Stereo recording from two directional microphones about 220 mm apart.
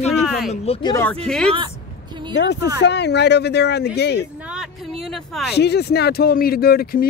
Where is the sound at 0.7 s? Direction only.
25° left (ahead or behind).